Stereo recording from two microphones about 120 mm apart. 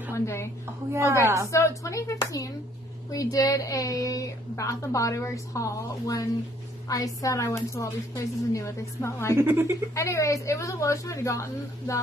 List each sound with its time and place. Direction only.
0.1 s a woman's voice: 25° left (ahead or behind)
0.9 s a woman's voice: 25° right (ahead or behind)
1.5 s speech: 25° left (ahead or behind)
9.3 s a woman's voice: 20° right (ahead or behind)
9.9 s speech: 25° left (ahead or behind)